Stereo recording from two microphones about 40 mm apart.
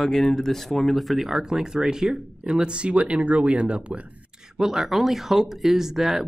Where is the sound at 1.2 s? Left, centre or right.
Centre.